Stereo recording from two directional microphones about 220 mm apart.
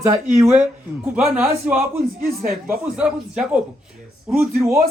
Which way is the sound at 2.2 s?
40° right (ahead or behind).